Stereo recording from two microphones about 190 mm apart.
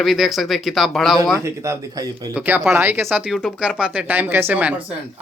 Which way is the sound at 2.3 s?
5° right (ahead or behind).